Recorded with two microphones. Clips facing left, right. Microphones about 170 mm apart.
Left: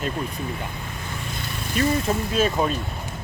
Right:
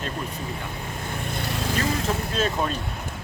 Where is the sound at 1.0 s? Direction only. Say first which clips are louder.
Right 5 dB; 55° right (ahead or behind); by 1.9 s 90° right.